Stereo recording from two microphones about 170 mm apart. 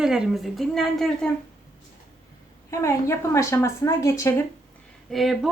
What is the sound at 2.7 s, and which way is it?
A woman's voice, 15° left (ahead or behind).